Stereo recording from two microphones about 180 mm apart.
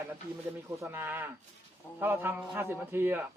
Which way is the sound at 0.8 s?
10° right (ahead or behind).